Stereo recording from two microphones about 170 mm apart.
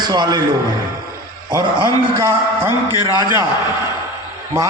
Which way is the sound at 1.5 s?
25° right (ahead or behind).